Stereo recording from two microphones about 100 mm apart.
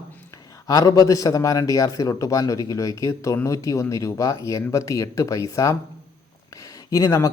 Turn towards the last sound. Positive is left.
turn(degrees=35)  # may be behind; listen again after turning